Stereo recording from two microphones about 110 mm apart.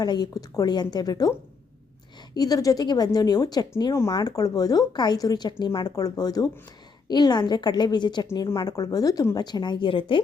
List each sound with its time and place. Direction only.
0.0 s speech: 40° left (ahead or behind)
2.3 s speech: 35° left (ahead or behind)